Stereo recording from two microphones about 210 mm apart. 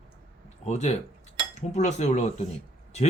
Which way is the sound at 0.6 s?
35° left (ahead or behind).